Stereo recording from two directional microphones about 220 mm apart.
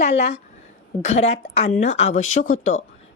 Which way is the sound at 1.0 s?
30° left (ahead or behind).